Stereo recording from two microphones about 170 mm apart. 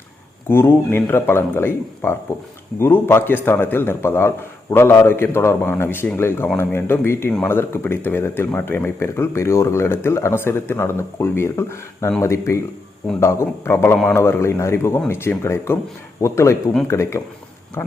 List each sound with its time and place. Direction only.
0.4 s speech: 15° left (ahead or behind)